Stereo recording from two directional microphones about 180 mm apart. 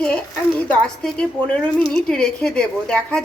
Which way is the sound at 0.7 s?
5° left (ahead or behind).